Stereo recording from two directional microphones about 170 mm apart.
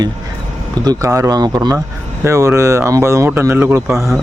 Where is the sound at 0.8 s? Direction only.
20° right (ahead or behind).